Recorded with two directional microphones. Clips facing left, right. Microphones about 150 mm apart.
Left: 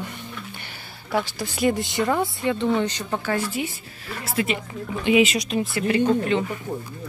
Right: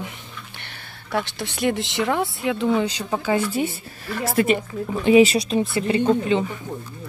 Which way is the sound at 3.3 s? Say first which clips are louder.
Right 6 dB; 30° right (ahead or behind).